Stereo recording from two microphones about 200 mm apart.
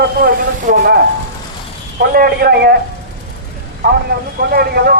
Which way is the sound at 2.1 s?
50° right (ahead or behind).